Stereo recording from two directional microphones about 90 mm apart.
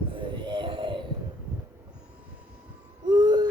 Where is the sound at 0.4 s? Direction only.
65° right (ahead or behind).